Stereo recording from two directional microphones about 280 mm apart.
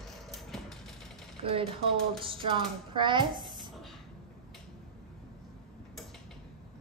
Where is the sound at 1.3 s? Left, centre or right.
Right.